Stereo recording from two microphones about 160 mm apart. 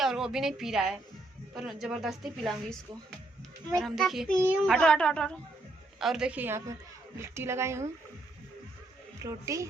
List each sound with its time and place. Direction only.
0.0 s a woman's voice: 5° right (ahead or behind)
9.1 s a woman's voice: 20° right (ahead or behind)